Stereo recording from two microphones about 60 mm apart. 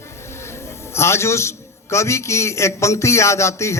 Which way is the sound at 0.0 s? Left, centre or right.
Left.